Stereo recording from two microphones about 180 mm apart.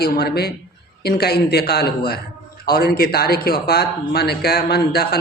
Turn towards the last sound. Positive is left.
turn(degrees=60)  # may be behind; listen again after turning